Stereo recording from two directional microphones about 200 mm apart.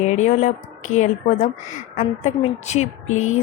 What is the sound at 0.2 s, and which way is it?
Speech, 35° left (ahead or behind).